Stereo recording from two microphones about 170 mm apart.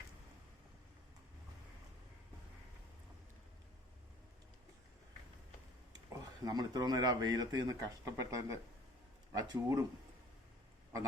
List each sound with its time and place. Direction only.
5.9 s speech: 20° right (ahead or behind)